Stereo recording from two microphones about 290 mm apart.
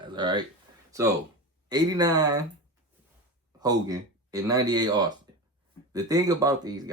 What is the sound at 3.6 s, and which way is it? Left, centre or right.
Speech, centre.